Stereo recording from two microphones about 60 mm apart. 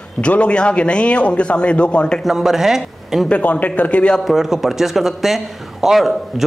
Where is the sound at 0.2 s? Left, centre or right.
Centre.